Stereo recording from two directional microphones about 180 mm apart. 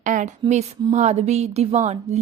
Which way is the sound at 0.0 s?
45° right (ahead or behind).